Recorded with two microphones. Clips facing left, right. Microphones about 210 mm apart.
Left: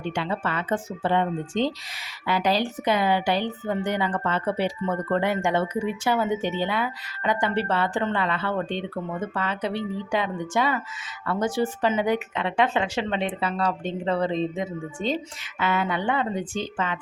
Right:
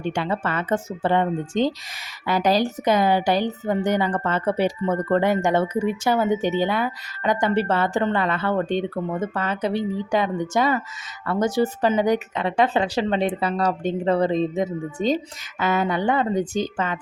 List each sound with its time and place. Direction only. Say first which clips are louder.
0.0 s a woman's voice: right 3 dB; 45° right (ahead or behind)